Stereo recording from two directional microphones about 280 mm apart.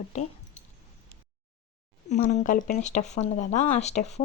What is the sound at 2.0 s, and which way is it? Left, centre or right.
Speech, left.